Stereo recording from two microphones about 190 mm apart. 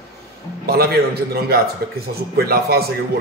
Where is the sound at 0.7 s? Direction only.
55° right (ahead or behind).